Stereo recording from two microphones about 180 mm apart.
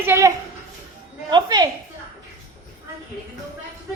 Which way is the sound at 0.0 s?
15° right (ahead or behind).